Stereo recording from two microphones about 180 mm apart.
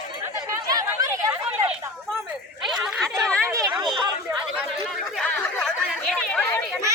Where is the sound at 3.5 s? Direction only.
15° right (ahead or behind).